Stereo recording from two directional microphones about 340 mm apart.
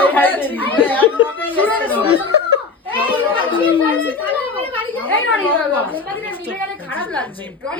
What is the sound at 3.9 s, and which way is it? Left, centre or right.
A woman's voice, centre.